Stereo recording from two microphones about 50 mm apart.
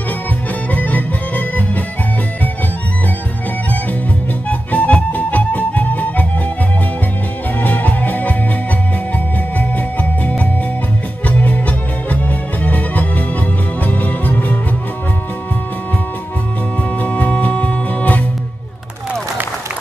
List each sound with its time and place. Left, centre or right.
0.7 s music: left
4.5 s music: left
7.5 s music: left
9.6 s music: left
17.0 s music: left